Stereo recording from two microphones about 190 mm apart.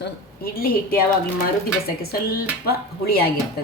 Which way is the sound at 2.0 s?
55° left (ahead or behind).